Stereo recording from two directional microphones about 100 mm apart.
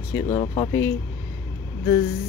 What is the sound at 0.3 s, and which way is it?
Speech, 60° left (ahead or behind).